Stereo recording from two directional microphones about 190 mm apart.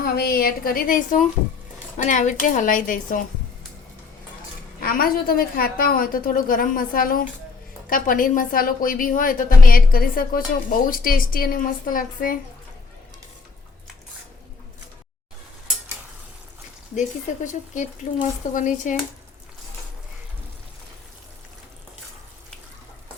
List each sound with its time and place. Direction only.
0.0 s a woman's voice: 55° left (ahead or behind)
4.8 s a woman's voice: 50° left (ahead or behind)
16.9 s speech: 40° left (ahead or behind)